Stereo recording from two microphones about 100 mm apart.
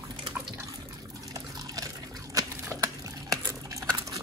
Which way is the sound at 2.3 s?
35° right (ahead or behind).